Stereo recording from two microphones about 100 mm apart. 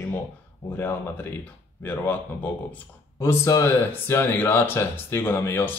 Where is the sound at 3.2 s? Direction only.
30° left (ahead or behind).